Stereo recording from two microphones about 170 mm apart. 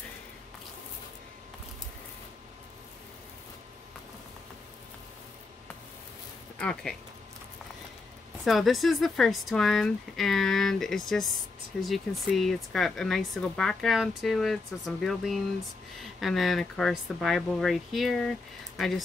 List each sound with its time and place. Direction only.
6.6 s speech: 5° left (ahead or behind)
8.5 s speech: centre (ahead or behind)